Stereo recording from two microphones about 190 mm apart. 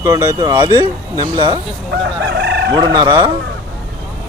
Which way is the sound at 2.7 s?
20° right (ahead or behind).